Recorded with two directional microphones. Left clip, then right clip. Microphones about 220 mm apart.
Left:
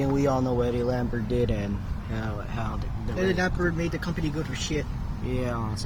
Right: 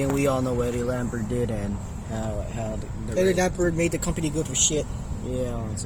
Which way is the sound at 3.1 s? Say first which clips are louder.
Right 4 dB; 20° right (ahead or behind).